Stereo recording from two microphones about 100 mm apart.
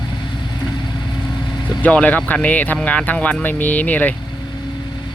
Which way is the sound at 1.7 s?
15° left (ahead or behind).